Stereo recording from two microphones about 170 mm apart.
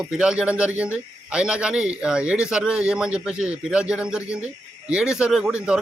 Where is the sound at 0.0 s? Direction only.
5° right (ahead or behind).